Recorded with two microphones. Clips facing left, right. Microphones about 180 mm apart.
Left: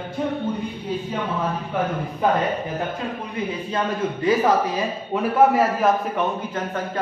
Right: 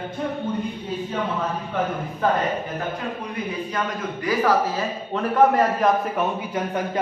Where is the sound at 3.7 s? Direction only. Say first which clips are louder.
Left 3 dB; 25° left (ahead or behind).